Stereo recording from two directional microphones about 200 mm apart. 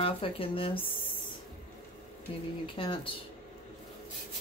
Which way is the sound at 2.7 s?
25° left (ahead or behind).